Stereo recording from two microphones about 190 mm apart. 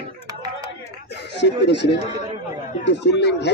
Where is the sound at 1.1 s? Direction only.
65° left (ahead or behind).